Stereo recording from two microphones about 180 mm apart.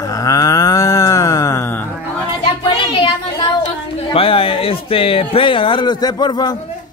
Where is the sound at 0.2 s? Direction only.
20° left (ahead or behind).